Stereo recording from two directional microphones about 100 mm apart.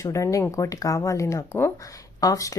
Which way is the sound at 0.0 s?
30° left (ahead or behind).